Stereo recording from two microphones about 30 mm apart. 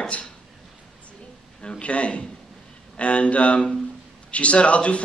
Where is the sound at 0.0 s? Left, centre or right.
Left.